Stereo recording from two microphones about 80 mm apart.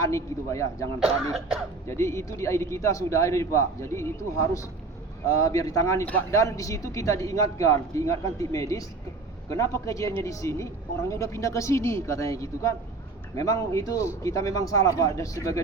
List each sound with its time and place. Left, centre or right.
0.0 s a man's voice: left
0.9 s speech: centre
1.9 s a man's voice: left